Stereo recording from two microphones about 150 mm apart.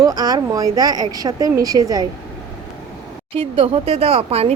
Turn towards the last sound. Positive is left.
turn(degrees=-45)  # may be behind; listen again after turning